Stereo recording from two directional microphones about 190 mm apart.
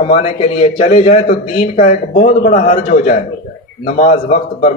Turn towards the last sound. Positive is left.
turn(degrees=35)  # may be behind; listen again after turning